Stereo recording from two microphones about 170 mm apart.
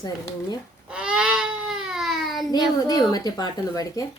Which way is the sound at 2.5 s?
25° left (ahead or behind).